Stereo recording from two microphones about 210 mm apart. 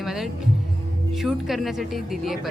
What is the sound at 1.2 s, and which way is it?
Speech, centre (ahead or behind).